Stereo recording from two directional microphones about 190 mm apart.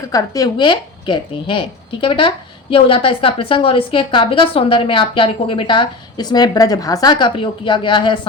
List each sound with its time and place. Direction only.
0.1 s speech: 20° left (ahead or behind)